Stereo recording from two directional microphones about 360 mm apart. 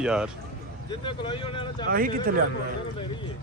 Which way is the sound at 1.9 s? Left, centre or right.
Right.